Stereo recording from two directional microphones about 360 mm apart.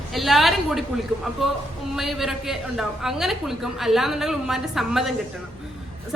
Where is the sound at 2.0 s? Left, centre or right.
Centre.